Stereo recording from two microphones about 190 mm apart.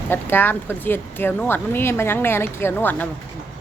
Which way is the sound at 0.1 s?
10° left (ahead or behind).